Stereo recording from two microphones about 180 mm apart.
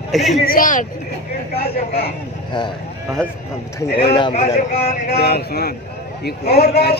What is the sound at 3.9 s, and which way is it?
Speech, 30° left (ahead or behind).